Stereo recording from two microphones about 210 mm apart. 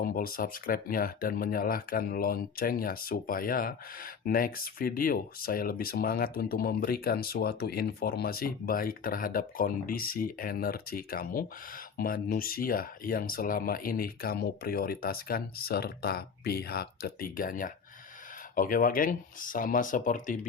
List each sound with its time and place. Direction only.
0.0 s speech: 45° left (ahead or behind)